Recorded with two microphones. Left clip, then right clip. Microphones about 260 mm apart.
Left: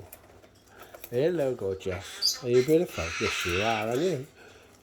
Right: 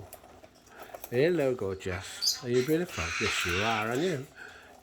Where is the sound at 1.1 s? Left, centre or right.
Centre.